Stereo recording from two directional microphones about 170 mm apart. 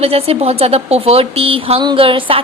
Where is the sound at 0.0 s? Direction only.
35° right (ahead or behind).